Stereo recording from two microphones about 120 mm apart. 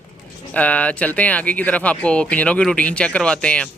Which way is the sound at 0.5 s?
10° left (ahead or behind).